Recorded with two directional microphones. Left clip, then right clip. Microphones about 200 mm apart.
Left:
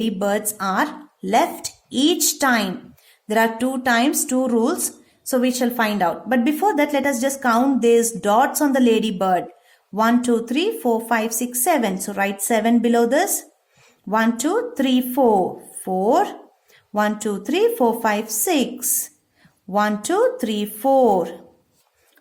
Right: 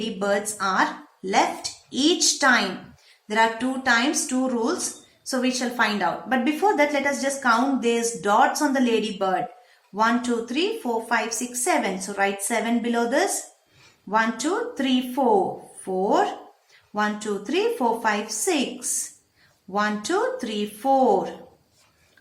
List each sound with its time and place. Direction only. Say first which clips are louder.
0.0 s a woman's voice: left 2 dB; 55° left (ahead or behind)